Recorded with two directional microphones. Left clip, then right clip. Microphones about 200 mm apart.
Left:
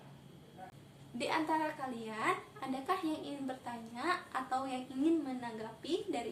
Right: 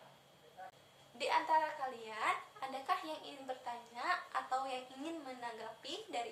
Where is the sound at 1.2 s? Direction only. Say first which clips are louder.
Right 1 dB; 10° left (ahead or behind).